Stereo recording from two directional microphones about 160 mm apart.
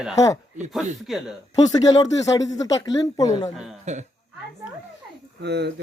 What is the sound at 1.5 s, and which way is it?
Speech, 25° left (ahead or behind).